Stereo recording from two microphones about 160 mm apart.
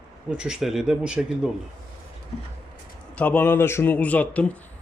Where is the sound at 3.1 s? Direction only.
10° left (ahead or behind).